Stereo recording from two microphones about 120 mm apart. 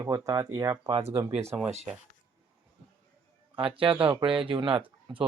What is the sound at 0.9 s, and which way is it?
Speech, 60° right (ahead or behind).